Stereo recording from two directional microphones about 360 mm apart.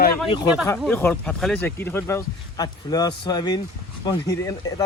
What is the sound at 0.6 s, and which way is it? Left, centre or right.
Speech, centre.